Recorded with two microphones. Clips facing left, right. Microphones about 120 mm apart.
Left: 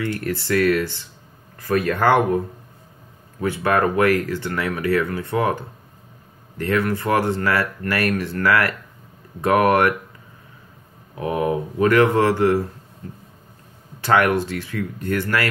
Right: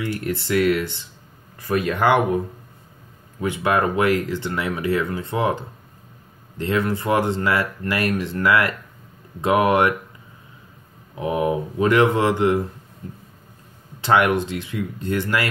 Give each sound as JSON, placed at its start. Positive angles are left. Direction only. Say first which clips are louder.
{"t": 0.0, "sound": "speech", "louder": "left 1 dB", "side_deg": -15}
{"t": 11.1, "sound": "speech", "louder": "even", "side_deg": -20}
{"t": 14.0, "sound": "speech", "louder": "even", "side_deg": -20}